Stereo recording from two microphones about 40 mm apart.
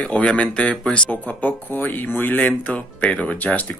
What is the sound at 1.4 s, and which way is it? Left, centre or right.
Speech, left.